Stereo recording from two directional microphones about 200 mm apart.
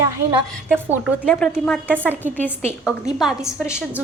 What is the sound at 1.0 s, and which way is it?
Speech, 5° left (ahead or behind).